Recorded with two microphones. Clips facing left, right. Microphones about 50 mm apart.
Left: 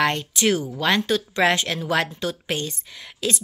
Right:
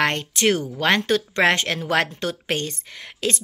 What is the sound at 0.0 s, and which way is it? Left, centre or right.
A woman's voice, right.